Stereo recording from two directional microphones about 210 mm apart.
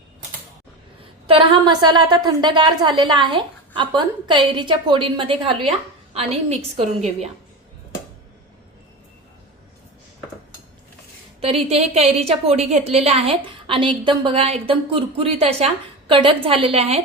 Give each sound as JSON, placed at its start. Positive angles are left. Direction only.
{"t": 1.3, "sound": "a woman's voice", "side_deg": -25}
{"t": 11.3, "sound": "a woman's voice", "side_deg": -30}